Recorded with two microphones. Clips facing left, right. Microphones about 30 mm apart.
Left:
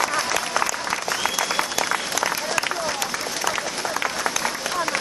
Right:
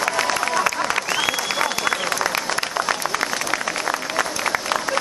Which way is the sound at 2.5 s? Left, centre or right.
Right.